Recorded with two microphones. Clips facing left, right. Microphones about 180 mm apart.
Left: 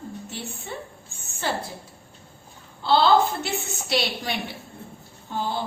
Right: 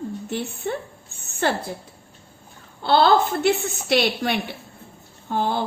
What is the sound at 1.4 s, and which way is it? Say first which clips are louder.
Speech: right 5 dB; 55° right (ahead or behind).